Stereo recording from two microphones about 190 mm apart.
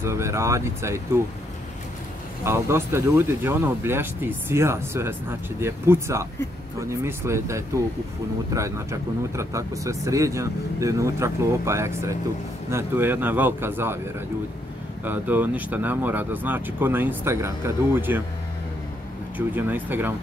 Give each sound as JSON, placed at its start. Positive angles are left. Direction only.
{"t": 0.0, "sound": "speech", "side_deg": -15}
{"t": 2.4, "sound": "speech", "side_deg": -15}
{"t": 15.0, "sound": "speech", "side_deg": -10}
{"t": 19.3, "sound": "speech", "side_deg": -10}